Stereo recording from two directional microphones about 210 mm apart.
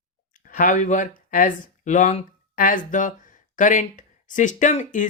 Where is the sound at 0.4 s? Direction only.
40° left (ahead or behind).